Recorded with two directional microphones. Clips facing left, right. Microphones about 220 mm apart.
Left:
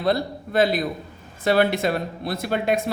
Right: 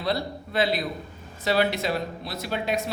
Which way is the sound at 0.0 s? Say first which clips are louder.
Left 5 dB; 50° left (ahead or behind).